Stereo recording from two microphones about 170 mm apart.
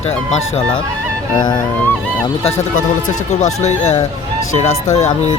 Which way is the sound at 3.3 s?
40° left (ahead or behind).